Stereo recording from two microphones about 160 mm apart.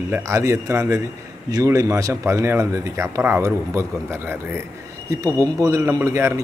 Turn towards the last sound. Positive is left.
turn(degrees=-15)  # may be behind; listen again after turning